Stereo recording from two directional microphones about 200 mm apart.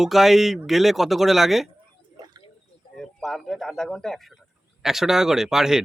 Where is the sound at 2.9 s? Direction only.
Centre (ahead or behind).